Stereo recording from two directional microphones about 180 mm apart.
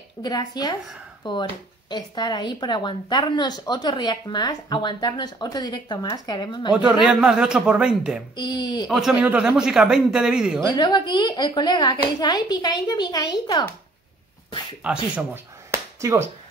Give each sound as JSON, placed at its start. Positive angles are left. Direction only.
{"t": 0.2, "sound": "speech", "side_deg": 20}
{"t": 7.1, "sound": "a man's voice", "side_deg": -5}
{"t": 8.4, "sound": "speech", "side_deg": 25}
{"t": 8.8, "sound": "a man's voice", "side_deg": 0}
{"t": 10.7, "sound": "speech", "side_deg": 25}
{"t": 15.1, "sound": "a sound", "side_deg": -15}